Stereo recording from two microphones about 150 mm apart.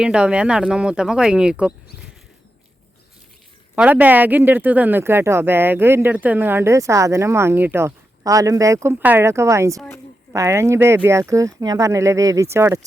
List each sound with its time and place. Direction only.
0.0 s speech: 5° right (ahead or behind)
3.8 s speech: 10° right (ahead or behind)